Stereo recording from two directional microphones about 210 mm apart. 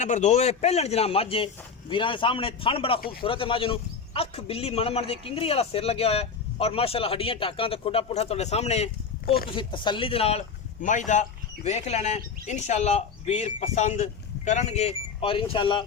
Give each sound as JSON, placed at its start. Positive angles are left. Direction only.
{"t": 0.0, "sound": "a man's voice", "side_deg": 35}
{"t": 3.0, "sound": "speech", "side_deg": 45}
{"t": 3.2, "sound": "a man's voice", "side_deg": 25}